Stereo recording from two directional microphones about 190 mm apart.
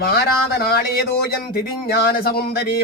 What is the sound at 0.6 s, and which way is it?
Speech, 55° left (ahead or behind).